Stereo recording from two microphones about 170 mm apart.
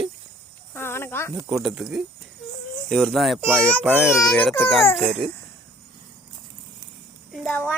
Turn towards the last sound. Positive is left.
turn(degrees=0)  # may be behind; listen again after turning